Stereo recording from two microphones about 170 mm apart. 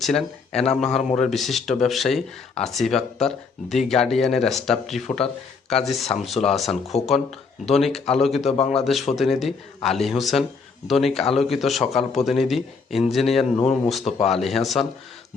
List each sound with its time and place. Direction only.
0.0 s a man's voice: centre (ahead or behind)
8.4 s a man's voice: 40° left (ahead or behind)
9.1 s speech: centre (ahead or behind)
13.4 s a man's voice: 35° left (ahead or behind)
14.3 s speech: centre (ahead or behind)